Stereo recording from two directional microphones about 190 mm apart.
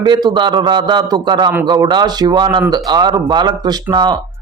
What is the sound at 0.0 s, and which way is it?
Speech, 25° right (ahead or behind).